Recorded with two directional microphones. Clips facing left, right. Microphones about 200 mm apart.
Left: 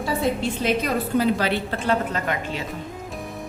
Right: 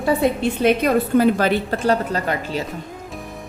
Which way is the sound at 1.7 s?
40° right (ahead or behind).